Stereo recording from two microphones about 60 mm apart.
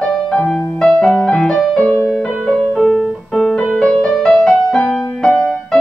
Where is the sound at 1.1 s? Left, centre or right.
Centre.